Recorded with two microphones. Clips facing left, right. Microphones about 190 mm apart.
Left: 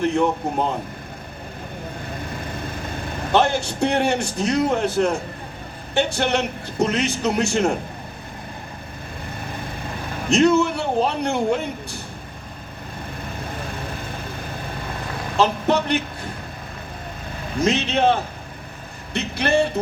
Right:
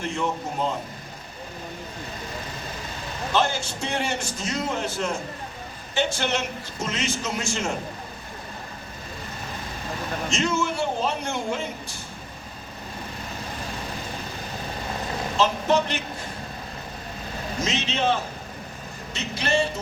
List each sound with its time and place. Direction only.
0.0 s a man's voice: 60° left (ahead or behind)
2.1 s vehicle: 55° left (ahead or behind)
5.9 s a man's voice: 60° left (ahead or behind)
10.2 s a man's voice: 60° left (ahead or behind)
15.4 s a man's voice: 60° left (ahead or behind)
17.6 s a man's voice: 60° left (ahead or behind)